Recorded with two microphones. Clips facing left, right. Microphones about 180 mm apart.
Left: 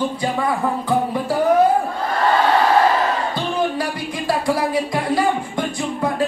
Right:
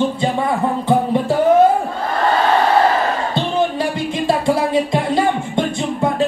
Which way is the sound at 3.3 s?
25° right (ahead or behind).